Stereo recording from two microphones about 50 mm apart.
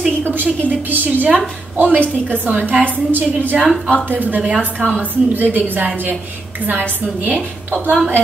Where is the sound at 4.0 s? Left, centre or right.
Right.